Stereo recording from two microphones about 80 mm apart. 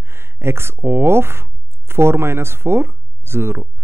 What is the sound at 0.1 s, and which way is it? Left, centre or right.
Speech, right.